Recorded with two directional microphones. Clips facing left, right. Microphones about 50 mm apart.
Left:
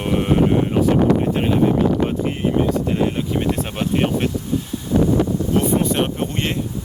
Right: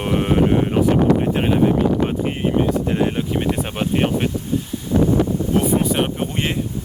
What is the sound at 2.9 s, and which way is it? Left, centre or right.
Speech, centre.